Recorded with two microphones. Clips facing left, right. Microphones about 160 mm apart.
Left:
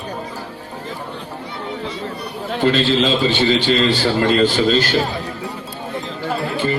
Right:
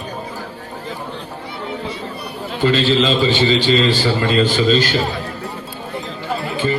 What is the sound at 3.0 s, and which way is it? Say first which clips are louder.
Speech: right 1 dB; 65° left (ahead or behind).